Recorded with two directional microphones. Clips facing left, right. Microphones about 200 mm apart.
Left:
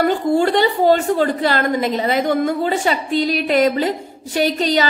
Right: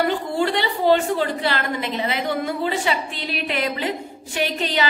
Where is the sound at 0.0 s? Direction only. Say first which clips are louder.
Left 6 dB; 45° left (ahead or behind).